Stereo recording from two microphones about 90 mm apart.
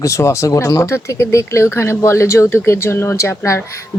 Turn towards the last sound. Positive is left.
turn(degrees=35)  # may be behind; listen again after turning